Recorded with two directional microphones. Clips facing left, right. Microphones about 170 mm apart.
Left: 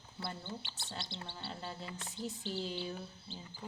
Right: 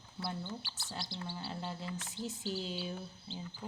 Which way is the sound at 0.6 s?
25° left (ahead or behind).